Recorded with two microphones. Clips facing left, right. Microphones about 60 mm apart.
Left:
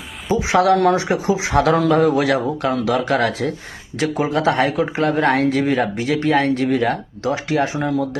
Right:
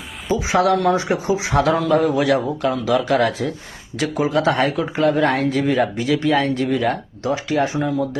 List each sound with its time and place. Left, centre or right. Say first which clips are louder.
0.5 s a man's voice: left 2 dB; left